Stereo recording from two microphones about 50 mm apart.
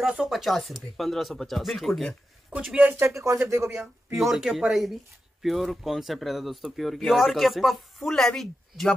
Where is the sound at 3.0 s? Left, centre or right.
Right.